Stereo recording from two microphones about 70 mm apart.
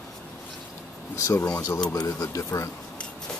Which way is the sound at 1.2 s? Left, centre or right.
Left.